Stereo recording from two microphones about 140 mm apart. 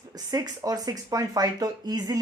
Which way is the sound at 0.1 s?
25° right (ahead or behind).